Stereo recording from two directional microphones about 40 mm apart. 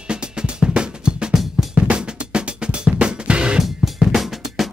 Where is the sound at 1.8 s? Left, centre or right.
Right.